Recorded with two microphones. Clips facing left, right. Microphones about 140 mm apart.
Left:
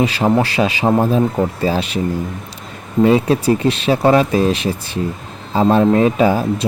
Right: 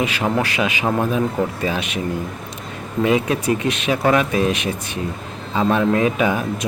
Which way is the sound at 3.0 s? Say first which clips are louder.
Left 5 dB; 35° left (ahead or behind).